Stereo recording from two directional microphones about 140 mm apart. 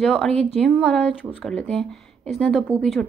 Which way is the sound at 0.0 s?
Centre (ahead or behind).